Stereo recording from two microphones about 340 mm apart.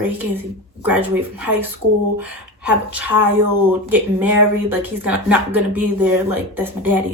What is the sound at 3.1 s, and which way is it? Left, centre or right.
Speech, right.